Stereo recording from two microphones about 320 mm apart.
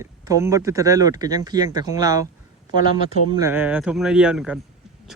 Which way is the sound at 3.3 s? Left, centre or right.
Centre.